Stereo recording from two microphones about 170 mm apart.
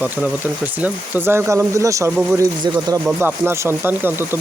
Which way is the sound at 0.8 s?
10° right (ahead or behind).